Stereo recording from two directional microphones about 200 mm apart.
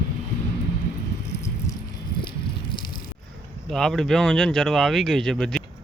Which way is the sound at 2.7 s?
20° left (ahead or behind).